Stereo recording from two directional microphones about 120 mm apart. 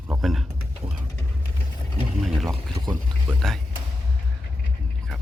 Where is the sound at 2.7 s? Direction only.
35° right (ahead or behind).